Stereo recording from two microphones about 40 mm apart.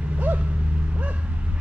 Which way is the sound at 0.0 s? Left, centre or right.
Right.